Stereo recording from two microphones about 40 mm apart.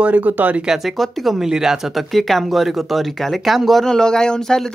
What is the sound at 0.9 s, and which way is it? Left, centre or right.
Speech, centre.